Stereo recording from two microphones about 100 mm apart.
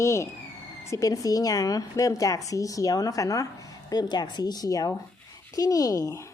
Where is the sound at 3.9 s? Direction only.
45° left (ahead or behind).